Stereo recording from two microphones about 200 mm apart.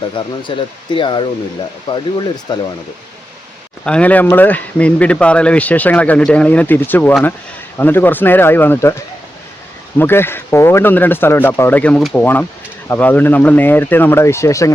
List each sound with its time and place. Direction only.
0.2 s speech: 25° left (ahead or behind)
3.8 s speech: 5° left (ahead or behind)
10.0 s speech: 10° left (ahead or behind)